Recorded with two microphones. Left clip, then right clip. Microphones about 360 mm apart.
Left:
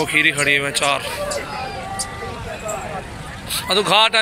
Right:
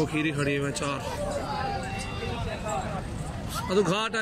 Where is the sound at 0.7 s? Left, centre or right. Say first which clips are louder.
Left 12 dB; centre.